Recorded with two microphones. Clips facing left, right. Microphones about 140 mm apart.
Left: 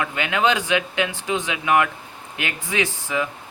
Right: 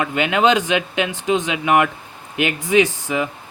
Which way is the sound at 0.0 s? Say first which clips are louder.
Right 4 dB; 20° right (ahead or behind).